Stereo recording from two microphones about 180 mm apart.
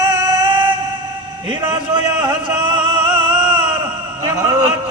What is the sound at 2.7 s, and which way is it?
Music, 25° right (ahead or behind).